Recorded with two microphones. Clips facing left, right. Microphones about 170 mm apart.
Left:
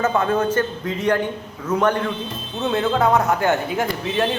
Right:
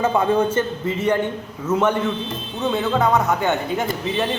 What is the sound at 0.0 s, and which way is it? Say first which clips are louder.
A man's voice: right 1 dB; 10° right (ahead or behind).